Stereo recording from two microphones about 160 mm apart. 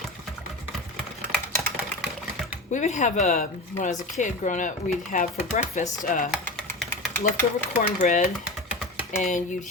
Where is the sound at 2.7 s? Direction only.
50° left (ahead or behind).